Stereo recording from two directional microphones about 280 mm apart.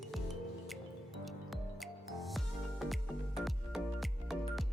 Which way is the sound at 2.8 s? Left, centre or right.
Centre.